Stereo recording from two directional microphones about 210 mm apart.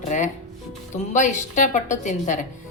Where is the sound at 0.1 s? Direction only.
35° left (ahead or behind).